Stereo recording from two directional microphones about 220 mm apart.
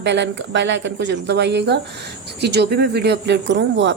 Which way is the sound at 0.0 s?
55° right (ahead or behind).